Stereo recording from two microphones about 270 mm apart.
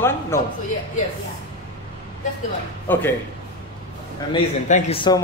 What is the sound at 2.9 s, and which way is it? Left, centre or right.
Speech, centre.